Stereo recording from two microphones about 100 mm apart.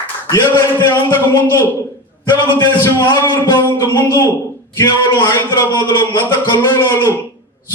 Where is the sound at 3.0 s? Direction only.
45° left (ahead or behind).